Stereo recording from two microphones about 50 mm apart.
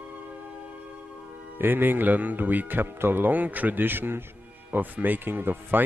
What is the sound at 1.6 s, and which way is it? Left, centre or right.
Speech, right.